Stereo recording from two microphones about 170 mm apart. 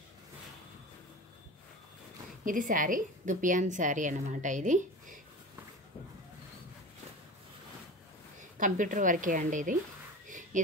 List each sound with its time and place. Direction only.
2.4 s a woman's voice: 50° right (ahead or behind)
8.4 s a woman's voice: 50° right (ahead or behind)
10.2 s whispering: 50° right (ahead or behind)